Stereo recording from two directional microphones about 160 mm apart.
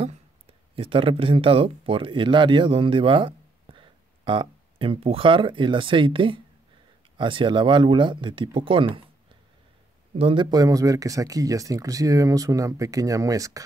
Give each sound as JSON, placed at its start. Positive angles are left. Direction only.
{"t": 0.7, "sound": "speech", "side_deg": -35}
{"t": 10.1, "sound": "speech", "side_deg": -35}